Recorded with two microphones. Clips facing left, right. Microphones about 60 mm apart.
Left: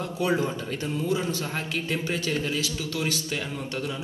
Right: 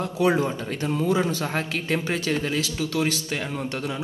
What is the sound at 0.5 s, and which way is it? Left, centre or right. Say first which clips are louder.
A man's voice: right 3 dB; right.